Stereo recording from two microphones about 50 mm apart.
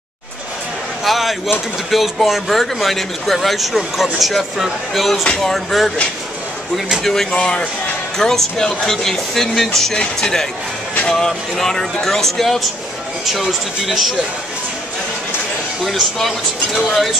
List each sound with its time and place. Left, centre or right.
1.0 s a sound: centre
1.9 s speech: centre
7.0 s speech: centre
7.3 s speech: centre
15.8 s speech: centre